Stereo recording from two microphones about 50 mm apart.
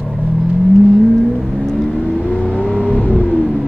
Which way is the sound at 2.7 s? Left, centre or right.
Left.